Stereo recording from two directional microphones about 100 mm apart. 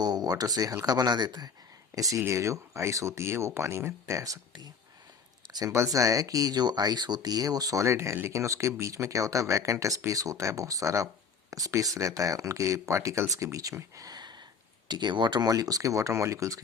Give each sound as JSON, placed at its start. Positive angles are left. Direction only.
{"t": 0.0, "sound": "speech", "side_deg": -40}
{"t": 2.0, "sound": "speech", "side_deg": -35}